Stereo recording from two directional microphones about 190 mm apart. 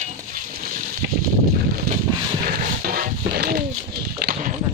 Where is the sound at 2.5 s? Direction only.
50° right (ahead or behind).